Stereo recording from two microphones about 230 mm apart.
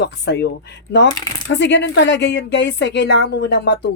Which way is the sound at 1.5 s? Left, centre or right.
Left.